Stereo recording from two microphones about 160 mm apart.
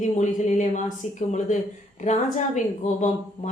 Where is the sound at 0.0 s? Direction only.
50° left (ahead or behind).